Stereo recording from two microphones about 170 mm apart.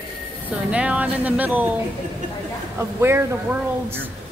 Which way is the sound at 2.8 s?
15° right (ahead or behind).